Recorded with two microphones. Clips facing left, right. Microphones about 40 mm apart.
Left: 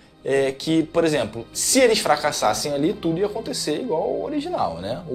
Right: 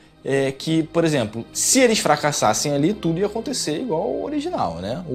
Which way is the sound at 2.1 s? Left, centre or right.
Right.